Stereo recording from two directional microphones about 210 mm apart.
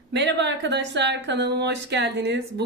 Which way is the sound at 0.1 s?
55° right (ahead or behind).